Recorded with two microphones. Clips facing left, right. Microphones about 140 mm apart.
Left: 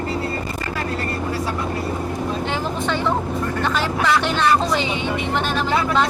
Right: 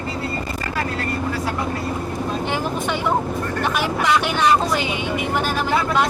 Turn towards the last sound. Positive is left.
turn(degrees=-15)  # may be behind; listen again after turning